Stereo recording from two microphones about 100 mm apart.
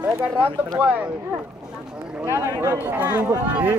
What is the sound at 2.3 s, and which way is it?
Speech, 25° right (ahead or behind).